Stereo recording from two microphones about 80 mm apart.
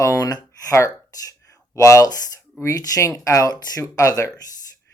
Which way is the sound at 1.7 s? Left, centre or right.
Left.